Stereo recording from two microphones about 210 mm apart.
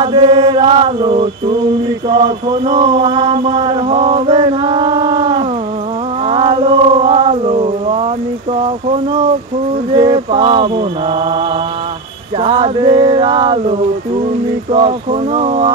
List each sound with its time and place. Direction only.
0.0 s mantra: 25° right (ahead or behind)
2.6 s a sound: 35° right (ahead or behind)
3.3 s mantra: 25° right (ahead or behind)
6.2 s a sound: 25° right (ahead or behind)
8.5 s speech: 25° right (ahead or behind)
9.9 s music: 20° right (ahead or behind)
12.4 s music: 20° right (ahead or behind)